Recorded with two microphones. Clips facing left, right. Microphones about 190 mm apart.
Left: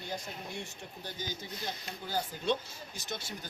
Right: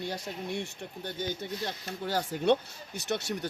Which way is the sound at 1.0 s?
60° right (ahead or behind).